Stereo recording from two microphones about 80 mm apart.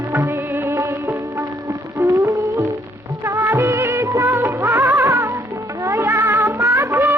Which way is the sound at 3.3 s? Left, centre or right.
Right.